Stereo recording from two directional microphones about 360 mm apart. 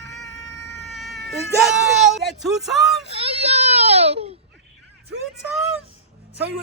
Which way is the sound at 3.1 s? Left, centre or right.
Centre.